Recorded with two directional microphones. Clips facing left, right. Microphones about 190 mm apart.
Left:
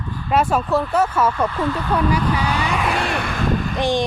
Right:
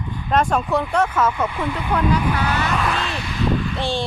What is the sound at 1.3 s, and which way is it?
Speech, 10° right (ahead or behind).